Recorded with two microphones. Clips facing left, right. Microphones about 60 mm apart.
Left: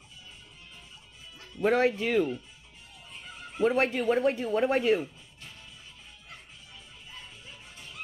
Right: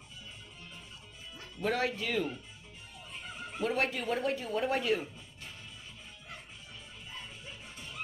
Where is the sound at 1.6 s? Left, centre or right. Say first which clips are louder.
Left 7 dB; left.